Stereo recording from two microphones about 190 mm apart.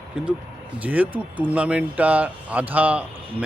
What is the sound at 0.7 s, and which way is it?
Speech, 10° right (ahead or behind).